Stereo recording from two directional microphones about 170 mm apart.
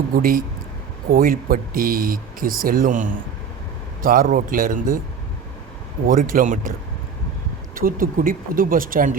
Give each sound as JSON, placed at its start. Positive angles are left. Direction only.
{"t": 0.2, "sound": "speech", "side_deg": -55}
{"t": 6.1, "sound": "speech", "side_deg": -55}
{"t": 7.8, "sound": "speech", "side_deg": -55}